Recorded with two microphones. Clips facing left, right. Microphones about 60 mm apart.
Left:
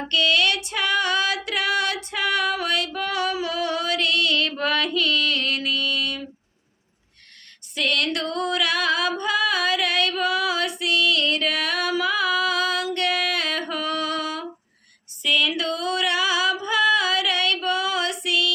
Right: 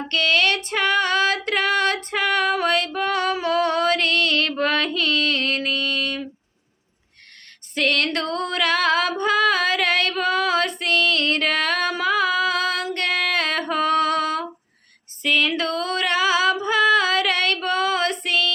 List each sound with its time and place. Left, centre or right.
0.1 s female singing: right
7.8 s music: right
15.2 s a sound: right